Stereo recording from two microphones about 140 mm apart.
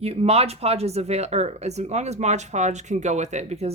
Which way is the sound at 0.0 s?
45° right (ahead or behind).